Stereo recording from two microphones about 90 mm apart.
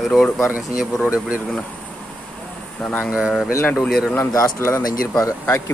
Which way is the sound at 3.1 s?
10° right (ahead or behind).